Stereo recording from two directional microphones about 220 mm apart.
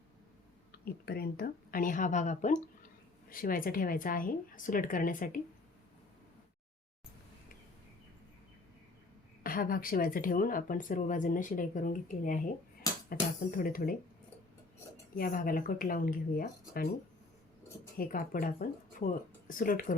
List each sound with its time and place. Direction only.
0.7 s speech: 45° left (ahead or behind)
9.4 s speech: 40° left (ahead or behind)
13.6 s speech: 40° left (ahead or behind)
15.1 s speech: 40° left (ahead or behind)
17.9 s speech: 40° left (ahead or behind)